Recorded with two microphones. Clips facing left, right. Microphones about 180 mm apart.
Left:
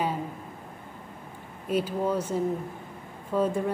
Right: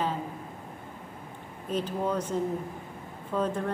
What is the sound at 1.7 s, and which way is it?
Speech, 10° left (ahead or behind).